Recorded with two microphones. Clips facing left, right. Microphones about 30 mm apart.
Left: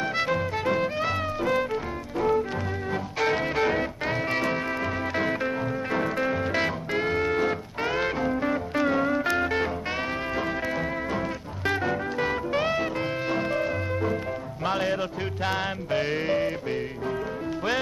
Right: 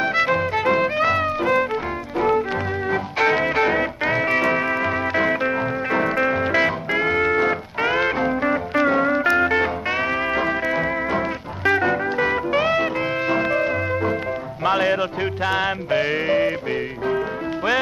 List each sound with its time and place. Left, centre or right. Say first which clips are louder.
0.2 s music: right 6 dB; right